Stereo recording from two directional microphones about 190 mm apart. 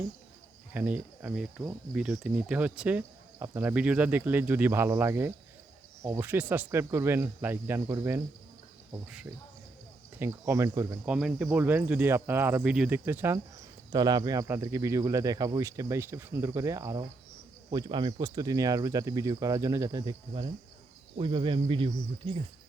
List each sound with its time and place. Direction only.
0.7 s speech: 10° right (ahead or behind); by 22.4 s 30° right (ahead or behind)